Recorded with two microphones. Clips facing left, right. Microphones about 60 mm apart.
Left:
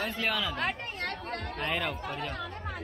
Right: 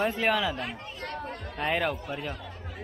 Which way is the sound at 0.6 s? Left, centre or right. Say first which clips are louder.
Left 4 dB; left.